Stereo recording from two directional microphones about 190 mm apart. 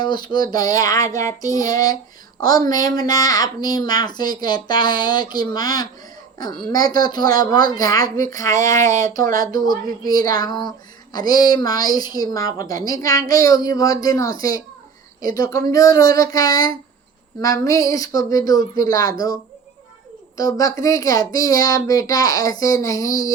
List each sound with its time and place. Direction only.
0.0 s speech: 25° left (ahead or behind)
9.1 s speech: 45° right (ahead or behind)
10.0 s speech: 20° left (ahead or behind)
15.4 s speech: 15° left (ahead or behind)
20.3 s speech: 20° left (ahead or behind)